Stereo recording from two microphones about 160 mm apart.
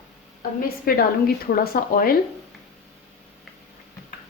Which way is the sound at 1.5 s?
65° left (ahead or behind).